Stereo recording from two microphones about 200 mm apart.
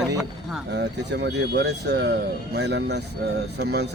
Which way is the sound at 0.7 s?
60° right (ahead or behind).